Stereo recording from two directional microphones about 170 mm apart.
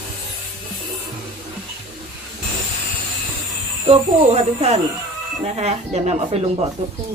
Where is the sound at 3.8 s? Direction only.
35° right (ahead or behind).